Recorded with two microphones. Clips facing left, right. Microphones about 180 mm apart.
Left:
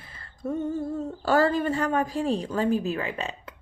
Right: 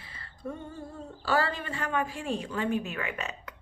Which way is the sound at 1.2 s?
45° left (ahead or behind).